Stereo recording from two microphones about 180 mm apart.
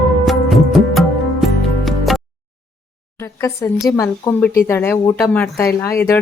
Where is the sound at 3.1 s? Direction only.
15° left (ahead or behind).